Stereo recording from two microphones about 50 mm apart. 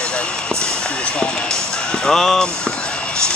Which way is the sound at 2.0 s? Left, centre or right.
Centre.